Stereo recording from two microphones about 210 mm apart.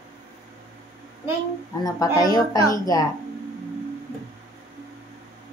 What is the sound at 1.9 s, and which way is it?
A woman's voice, 15° left (ahead or behind).